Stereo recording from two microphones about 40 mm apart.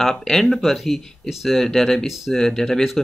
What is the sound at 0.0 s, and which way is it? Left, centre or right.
Speech, centre.